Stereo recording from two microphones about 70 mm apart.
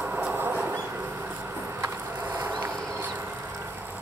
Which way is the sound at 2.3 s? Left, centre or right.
Right.